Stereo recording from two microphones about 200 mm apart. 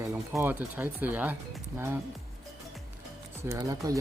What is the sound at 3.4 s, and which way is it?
Speech, 15° right (ahead or behind).